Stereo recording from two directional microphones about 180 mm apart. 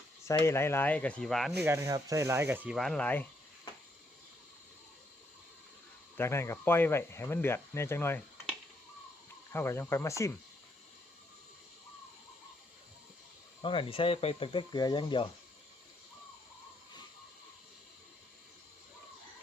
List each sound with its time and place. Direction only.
0.3 s speech: 15° left (ahead or behind)
1.6 s speech: 15° right (ahead or behind)
2.7 s speech: 5° left (ahead or behind)
6.1 s speech: 15° left (ahead or behind)
9.5 s speech: 15° left (ahead or behind)
13.6 s speech: 30° left (ahead or behind)